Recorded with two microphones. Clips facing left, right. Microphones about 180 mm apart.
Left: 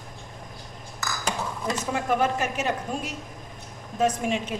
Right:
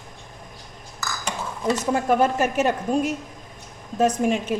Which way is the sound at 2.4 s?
50° right (ahead or behind).